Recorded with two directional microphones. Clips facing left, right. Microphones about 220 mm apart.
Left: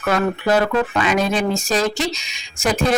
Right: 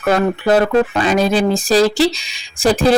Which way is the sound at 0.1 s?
35° right (ahead or behind).